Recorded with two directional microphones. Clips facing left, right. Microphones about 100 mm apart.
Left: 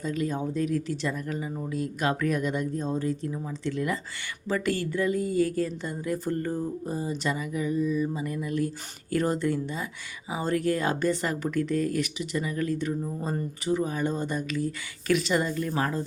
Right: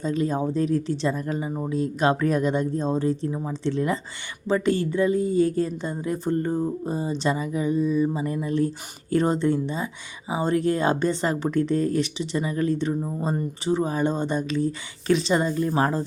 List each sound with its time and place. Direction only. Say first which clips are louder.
0.0 s speech: right 5 dB; 30° right (ahead or behind)